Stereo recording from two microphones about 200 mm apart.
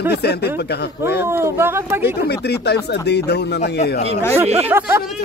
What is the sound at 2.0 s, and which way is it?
Speech, 55° left (ahead or behind).